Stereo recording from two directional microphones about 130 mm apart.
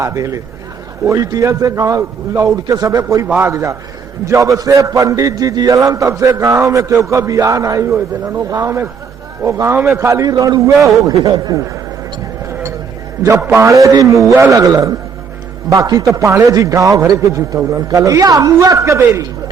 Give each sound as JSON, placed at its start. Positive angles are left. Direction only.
{"t": 0.0, "sound": "a man's voice", "side_deg": -25}
{"t": 3.2, "sound": "a man's voice", "side_deg": -15}
{"t": 13.2, "sound": "a man's voice", "side_deg": -25}